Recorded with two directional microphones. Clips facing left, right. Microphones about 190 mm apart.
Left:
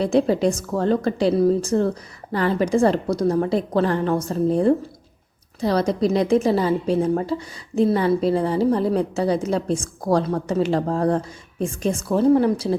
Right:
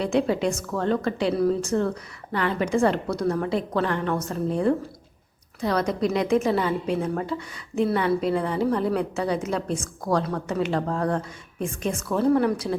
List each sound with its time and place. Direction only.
0.0 s a woman's voice: 35° left (ahead or behind)